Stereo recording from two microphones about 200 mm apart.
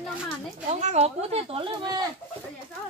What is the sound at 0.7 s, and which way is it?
Speech, 35° right (ahead or behind).